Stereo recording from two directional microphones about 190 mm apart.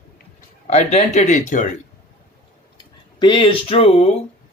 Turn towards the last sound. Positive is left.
turn(degrees=30)  # may be behind; listen again after turning